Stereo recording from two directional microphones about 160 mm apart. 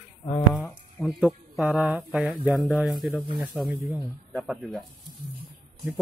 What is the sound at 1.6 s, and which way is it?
Speech, 5° right (ahead or behind).